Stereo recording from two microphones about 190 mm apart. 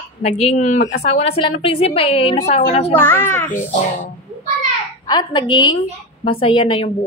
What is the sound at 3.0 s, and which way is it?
Speech, 10° left (ahead or behind).